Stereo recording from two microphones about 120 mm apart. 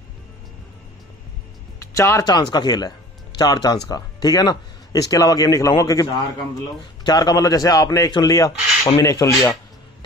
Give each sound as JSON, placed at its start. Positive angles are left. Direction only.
{"t": 1.8, "sound": "speech", "side_deg": 25}